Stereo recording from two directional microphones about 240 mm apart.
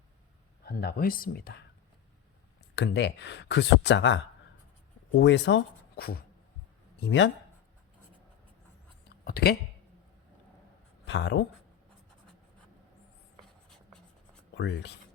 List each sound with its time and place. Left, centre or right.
0.6 s speech: left
2.7 s speech: left
9.0 s a sound: left
11.0 s speech: left
14.5 s speech: left